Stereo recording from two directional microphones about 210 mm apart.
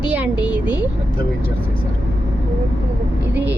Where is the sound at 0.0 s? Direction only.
5° right (ahead or behind).